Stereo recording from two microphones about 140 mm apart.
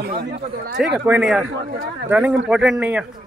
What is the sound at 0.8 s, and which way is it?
A man's voice, 5° right (ahead or behind).